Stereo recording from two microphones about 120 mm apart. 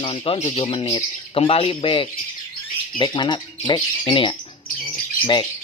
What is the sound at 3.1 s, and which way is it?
Speech, 40° left (ahead or behind).